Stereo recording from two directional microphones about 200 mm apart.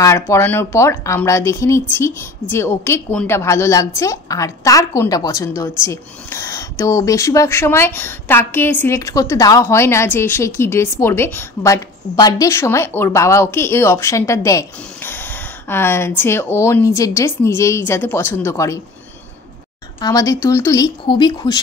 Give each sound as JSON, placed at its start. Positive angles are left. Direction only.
{"t": 0.0, "sound": "speech", "side_deg": 15}
{"t": 20.0, "sound": "speech", "side_deg": 15}